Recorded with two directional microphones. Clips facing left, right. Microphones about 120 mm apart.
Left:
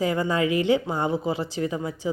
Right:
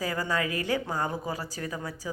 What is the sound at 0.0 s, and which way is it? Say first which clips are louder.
A woman's voice: left 6 dB; 20° left (ahead or behind).